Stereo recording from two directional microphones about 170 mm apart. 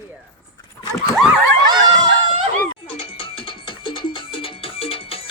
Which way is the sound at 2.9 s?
30° left (ahead or behind).